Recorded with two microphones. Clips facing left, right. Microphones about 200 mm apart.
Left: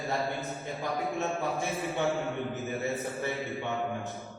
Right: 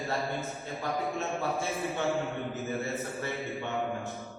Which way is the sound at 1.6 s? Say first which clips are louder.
Left 1 dB; 15° left (ahead or behind).